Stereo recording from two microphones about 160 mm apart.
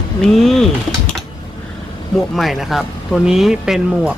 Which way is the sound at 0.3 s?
Centre (ahead or behind).